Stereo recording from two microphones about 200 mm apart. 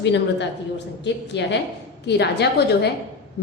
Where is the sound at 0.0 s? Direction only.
60° left (ahead or behind).